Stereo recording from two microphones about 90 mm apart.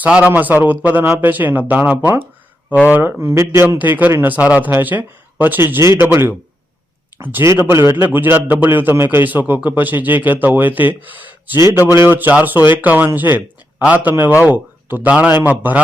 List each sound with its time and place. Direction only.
0.0 s a man's voice: 10° right (ahead or behind); by 3.8 s 30° right (ahead or behind)
3.8 s a man's voice: 20° right (ahead or behind)